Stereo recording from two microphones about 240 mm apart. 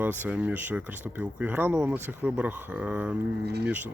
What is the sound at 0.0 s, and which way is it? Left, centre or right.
Speech, centre.